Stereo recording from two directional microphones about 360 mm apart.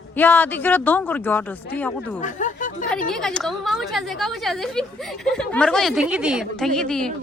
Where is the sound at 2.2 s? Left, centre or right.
Left.